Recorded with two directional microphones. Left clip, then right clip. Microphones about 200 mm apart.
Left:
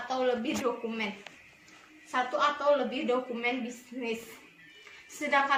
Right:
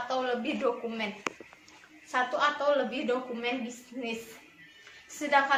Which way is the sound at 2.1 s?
15° right (ahead or behind).